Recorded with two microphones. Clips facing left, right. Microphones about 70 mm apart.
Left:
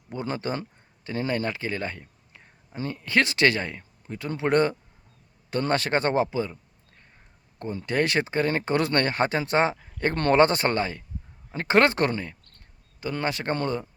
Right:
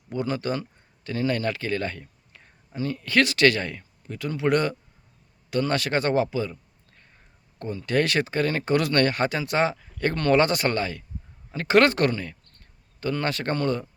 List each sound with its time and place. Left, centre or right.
0.1 s speech: left
7.6 s speech: left